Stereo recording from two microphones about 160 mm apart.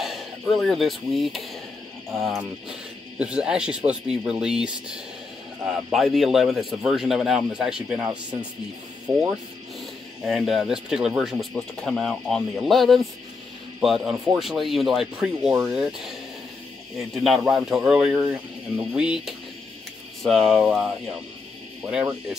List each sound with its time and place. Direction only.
0.0 s speech: centre (ahead or behind)
3.2 s speech: 5° right (ahead or behind)
9.1 s speech: 25° right (ahead or behind)
10.2 s speech: centre (ahead or behind)
17.1 s speech: centre (ahead or behind)
21.8 s speech: 15° right (ahead or behind)